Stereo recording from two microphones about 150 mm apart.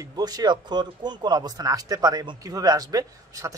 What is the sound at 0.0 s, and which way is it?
Speech, 25° right (ahead or behind).